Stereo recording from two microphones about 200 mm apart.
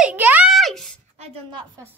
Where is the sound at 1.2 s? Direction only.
30° right (ahead or behind).